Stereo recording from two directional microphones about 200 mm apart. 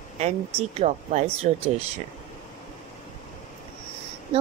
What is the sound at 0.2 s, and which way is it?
Speech, 30° right (ahead or behind).